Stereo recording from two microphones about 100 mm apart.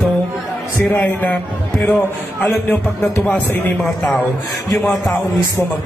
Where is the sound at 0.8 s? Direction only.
15° left (ahead or behind).